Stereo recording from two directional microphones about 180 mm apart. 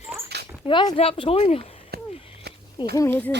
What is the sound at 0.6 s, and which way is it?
Speech, 30° left (ahead or behind).